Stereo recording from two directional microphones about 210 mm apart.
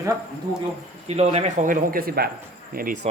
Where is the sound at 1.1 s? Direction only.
30° right (ahead or behind).